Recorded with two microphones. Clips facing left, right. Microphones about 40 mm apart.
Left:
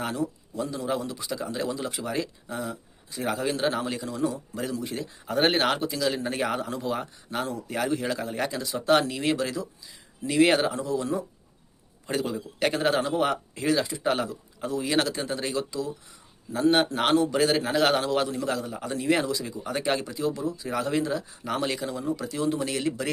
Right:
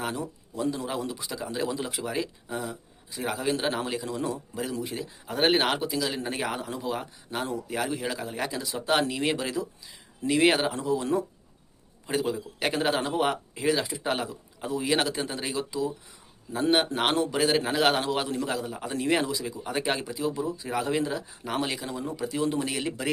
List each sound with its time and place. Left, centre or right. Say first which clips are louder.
0.5 s a man's voice: right 2 dB; centre
4.3 s a man's voice: even; centre
10.4 s a man's voice: left 2 dB; centre
12.0 s a man's voice: right 1 dB; centre
20.3 s speech: even; right
20.7 s a man's voice: left 2 dB; centre
22.1 s a man's voice: right 1 dB; centre